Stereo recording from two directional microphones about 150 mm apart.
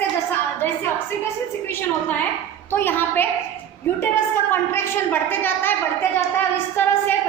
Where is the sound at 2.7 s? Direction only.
15° left (ahead or behind).